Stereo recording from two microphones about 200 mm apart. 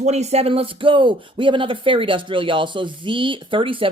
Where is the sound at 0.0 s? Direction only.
35° right (ahead or behind).